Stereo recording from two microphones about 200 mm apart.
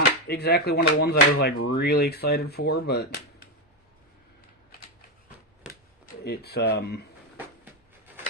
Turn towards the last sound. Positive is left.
turn(degrees=55)  # may be behind; listen again after turning